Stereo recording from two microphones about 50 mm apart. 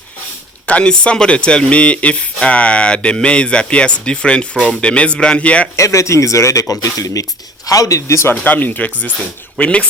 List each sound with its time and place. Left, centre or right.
0.7 s speech: left
5.7 s speech: left
8.4 s speech: left